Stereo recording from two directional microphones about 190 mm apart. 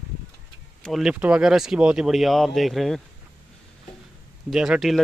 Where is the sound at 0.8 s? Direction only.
Centre (ahead or behind).